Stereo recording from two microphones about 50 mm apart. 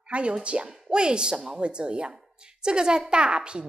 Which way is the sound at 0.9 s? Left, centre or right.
Centre.